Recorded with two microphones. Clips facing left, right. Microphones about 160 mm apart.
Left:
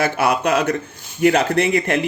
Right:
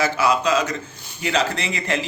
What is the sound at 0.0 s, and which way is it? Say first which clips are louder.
Speech: left 1 dB; 60° left (ahead or behind).